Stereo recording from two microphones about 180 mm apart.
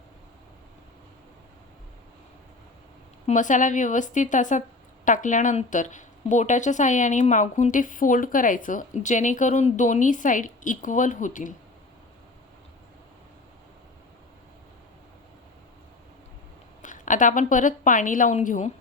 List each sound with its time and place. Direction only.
3.2 s a woman's voice: 45° left (ahead or behind)
16.8 s a woman's voice: 45° left (ahead or behind)